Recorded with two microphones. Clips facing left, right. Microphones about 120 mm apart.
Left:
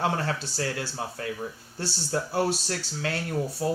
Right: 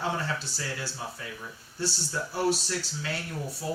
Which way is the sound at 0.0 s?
60° left (ahead or behind).